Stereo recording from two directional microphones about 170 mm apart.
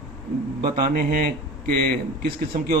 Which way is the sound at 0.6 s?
60° right (ahead or behind).